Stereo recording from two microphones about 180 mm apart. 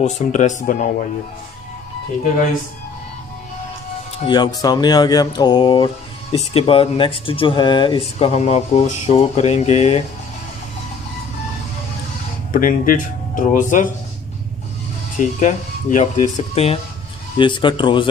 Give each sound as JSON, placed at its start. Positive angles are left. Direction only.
{"t": 0.0, "sound": "speech", "side_deg": 40}
{"t": 4.2, "sound": "speech", "side_deg": 25}
{"t": 12.5, "sound": "speech", "side_deg": 50}
{"t": 15.1, "sound": "speech", "side_deg": 40}